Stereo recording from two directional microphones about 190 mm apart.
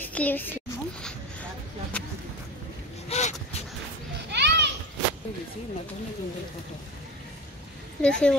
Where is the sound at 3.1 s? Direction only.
35° left (ahead or behind).